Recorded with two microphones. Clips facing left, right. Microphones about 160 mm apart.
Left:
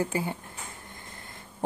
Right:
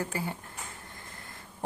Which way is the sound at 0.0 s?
20° left (ahead or behind).